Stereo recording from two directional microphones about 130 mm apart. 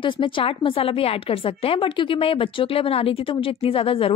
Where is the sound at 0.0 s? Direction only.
40° left (ahead or behind).